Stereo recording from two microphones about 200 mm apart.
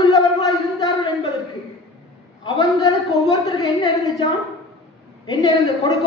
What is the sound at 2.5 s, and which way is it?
A man's voice, 20° left (ahead or behind).